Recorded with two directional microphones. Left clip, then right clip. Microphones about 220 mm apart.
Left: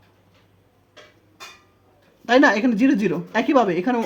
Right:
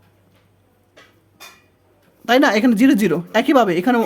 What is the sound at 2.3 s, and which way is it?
Speech, 30° right (ahead or behind).